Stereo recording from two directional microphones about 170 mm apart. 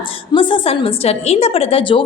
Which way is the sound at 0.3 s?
35° left (ahead or behind).